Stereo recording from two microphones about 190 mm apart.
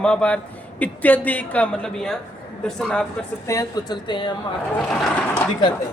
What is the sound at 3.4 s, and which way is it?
Speech, 15° left (ahead or behind).